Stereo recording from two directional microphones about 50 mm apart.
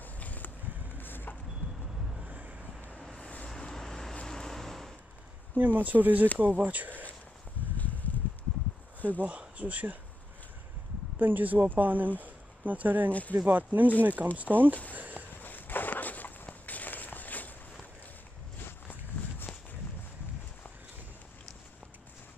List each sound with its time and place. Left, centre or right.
0.0 s a sound: left
0.9 s vehicle: left
2.2 s vehicle: right
3.2 s vehicle: left
3.4 s vehicle: centre
5.6 s speech: right
7.7 s a sound: left
9.2 s speech: right
11.1 s speech: right
15.0 s a sound: right
15.4 s a sound: left
16.4 s walk: left
18.6 s walk: left